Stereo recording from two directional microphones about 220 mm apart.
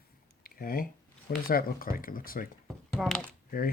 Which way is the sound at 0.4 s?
40° left (ahead or behind).